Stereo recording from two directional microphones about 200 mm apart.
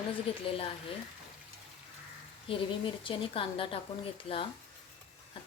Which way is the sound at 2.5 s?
25° left (ahead or behind).